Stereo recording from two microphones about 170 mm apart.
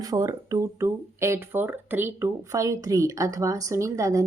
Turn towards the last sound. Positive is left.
turn(degrees=-20)  # may be behind; listen again after turning